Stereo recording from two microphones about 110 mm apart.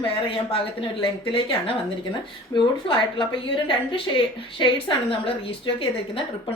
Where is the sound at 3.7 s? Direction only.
50° left (ahead or behind).